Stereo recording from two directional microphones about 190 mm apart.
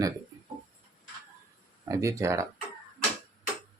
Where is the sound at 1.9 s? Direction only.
15° right (ahead or behind).